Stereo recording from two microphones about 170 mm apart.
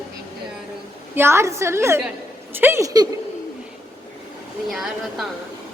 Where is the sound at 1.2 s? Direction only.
15° right (ahead or behind).